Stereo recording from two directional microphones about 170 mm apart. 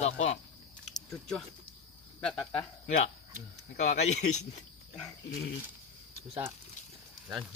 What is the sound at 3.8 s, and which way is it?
Speech, 45° left (ahead or behind).